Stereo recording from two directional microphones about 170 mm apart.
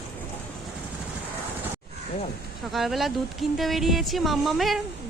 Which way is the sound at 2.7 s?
Centre (ahead or behind).